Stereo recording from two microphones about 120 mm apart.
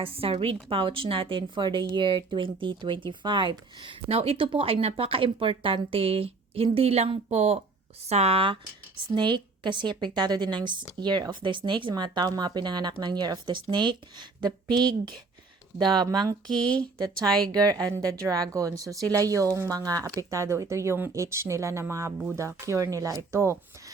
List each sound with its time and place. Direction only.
0.0 s a woman's voice: 50° right (ahead or behind)
4.1 s a woman's voice: 55° right (ahead or behind)
9.1 s speech: 40° right (ahead or behind)
16.5 s speech: 10° left (ahead or behind)
17.0 s speech: 30° right (ahead or behind)